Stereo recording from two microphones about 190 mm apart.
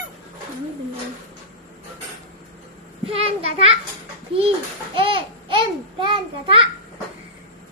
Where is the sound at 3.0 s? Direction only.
30° right (ahead or behind).